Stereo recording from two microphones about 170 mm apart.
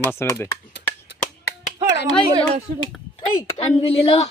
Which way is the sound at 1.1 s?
90° left.